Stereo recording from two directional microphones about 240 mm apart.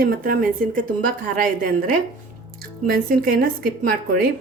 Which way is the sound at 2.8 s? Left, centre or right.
Right.